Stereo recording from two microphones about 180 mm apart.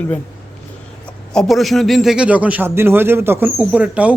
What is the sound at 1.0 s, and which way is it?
A man's voice, 5° left (ahead or behind).